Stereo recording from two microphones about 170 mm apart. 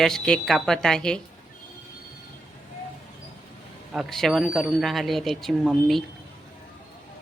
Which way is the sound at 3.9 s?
Centre (ahead or behind).